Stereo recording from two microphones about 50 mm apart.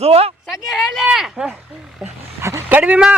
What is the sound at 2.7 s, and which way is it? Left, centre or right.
Speech, right.